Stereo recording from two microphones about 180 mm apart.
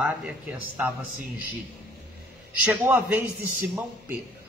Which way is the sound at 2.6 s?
10° right (ahead or behind).